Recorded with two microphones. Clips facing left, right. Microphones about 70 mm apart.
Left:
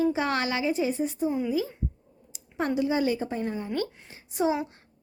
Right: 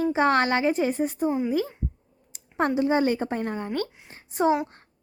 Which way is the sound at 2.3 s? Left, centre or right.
Right.